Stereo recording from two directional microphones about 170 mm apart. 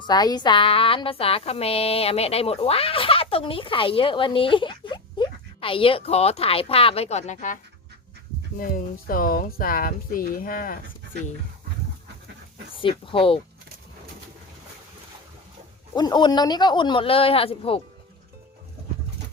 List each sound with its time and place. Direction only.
0.0 s speech: 25° left (ahead or behind); by 7.6 s 45° left (ahead or behind)
8.5 s speech: 55° left (ahead or behind)
12.7 s speech: 30° left (ahead or behind)
16.0 s speech: 25° left (ahead or behind)